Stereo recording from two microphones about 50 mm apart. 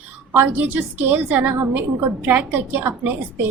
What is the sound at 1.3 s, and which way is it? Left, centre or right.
A woman's voice, right.